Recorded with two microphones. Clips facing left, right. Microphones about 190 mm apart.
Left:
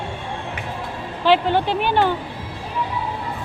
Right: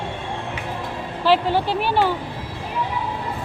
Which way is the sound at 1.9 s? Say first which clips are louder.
Left 1 dB; 5° right (ahead or behind).